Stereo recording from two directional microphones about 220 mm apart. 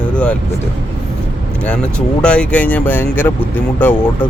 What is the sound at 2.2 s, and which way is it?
Speech, 5° left (ahead or behind).